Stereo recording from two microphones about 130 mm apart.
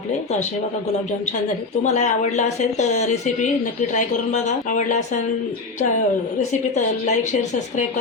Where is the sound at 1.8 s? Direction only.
65° left (ahead or behind).